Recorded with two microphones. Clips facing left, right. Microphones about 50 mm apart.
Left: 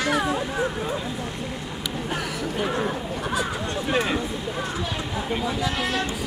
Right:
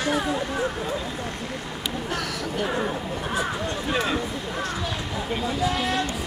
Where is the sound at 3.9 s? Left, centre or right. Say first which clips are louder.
Left 2 dB; centre.